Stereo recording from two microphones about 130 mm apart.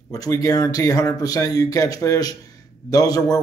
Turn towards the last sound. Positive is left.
turn(degrees=30)  # may be behind; listen again after turning